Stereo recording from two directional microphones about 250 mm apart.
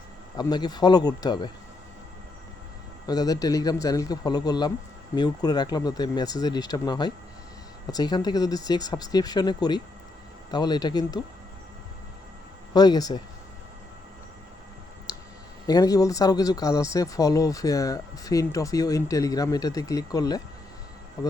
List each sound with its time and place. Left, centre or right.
0.3 s speech: centre
3.1 s speech: centre
12.7 s speech: centre
15.1 s clicking: centre
15.6 s speech: centre